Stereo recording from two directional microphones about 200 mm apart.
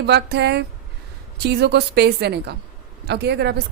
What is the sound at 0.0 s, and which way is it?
A woman's voice, 55° right (ahead or behind).